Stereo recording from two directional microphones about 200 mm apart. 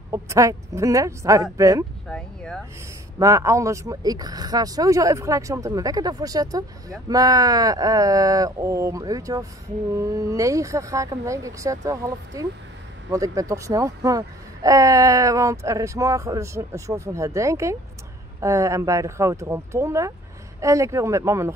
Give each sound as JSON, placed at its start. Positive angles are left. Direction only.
{"t": 0.1, "sound": "speech", "side_deg": -15}
{"t": 2.0, "sound": "speech", "side_deg": 5}
{"t": 3.2, "sound": "speech", "side_deg": -15}